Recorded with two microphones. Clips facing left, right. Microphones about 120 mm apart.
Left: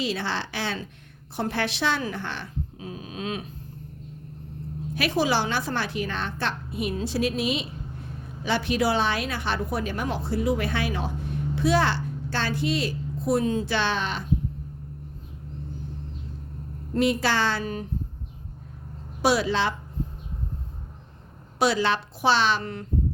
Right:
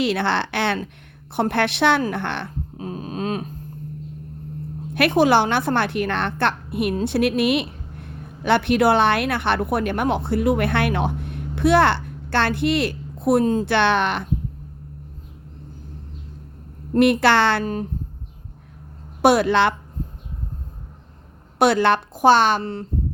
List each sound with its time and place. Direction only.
0.0 s a woman's voice: 65° right (ahead or behind)
2.7 s a sound: 45° right (ahead or behind)
4.9 s a woman's voice: 60° right (ahead or behind)
13.4 s speech: 40° right (ahead or behind)
13.7 s a woman's voice: 65° right (ahead or behind)
17.0 s a woman's voice: 65° right (ahead or behind)
17.6 s speech: 40° right (ahead or behind)
19.2 s a woman's voice: 55° right (ahead or behind)
21.6 s a woman's voice: 60° right (ahead or behind)
22.6 s speech: 30° right (ahead or behind)